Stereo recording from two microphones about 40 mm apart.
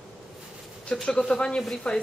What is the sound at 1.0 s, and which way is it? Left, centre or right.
Speech, left.